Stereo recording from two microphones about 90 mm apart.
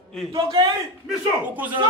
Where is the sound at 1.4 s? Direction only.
20° right (ahead or behind).